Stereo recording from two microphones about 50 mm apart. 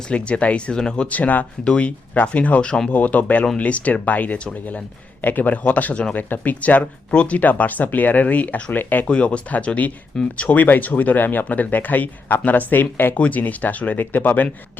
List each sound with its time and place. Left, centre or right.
0.1 s speech: left
1.1 s speech: left
1.6 s speech: centre
2.9 s speech: left
9.0 s speech: left
13.1 s speech: left